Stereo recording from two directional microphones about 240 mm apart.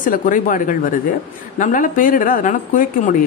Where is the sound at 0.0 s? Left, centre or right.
Left.